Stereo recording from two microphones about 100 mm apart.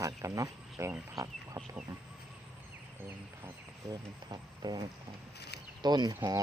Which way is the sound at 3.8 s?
45° right (ahead or behind).